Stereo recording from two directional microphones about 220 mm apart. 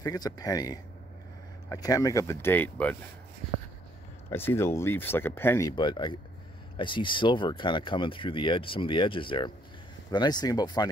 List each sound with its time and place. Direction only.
0.0 s speech: 15° left (ahead or behind)
4.3 s speech: 10° left (ahead or behind)